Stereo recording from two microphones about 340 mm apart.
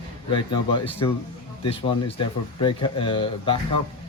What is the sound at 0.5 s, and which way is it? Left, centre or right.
Speech, centre.